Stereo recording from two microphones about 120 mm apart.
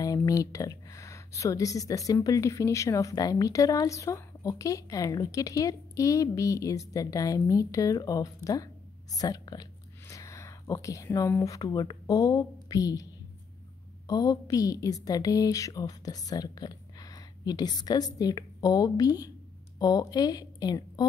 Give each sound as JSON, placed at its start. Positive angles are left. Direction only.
{"t": 0.0, "sound": "speech", "side_deg": 30}
{"t": 14.0, "sound": "a woman's voice", "side_deg": 30}